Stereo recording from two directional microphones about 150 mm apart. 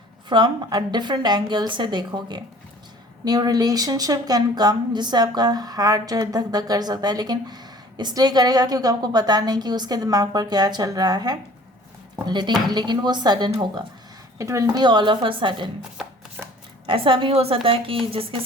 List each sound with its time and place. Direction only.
0.3 s a woman's voice: 30° right (ahead or behind)
16.0 s chopping: 5° right (ahead or behind)
16.4 s shuffling cards: 5° right (ahead or behind)
16.8 s a woman's voice: 35° right (ahead or behind)